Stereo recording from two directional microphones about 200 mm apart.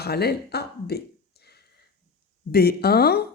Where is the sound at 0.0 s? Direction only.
55° left (ahead or behind).